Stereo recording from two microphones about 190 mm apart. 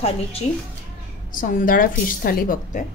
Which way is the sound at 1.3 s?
45° left (ahead or behind).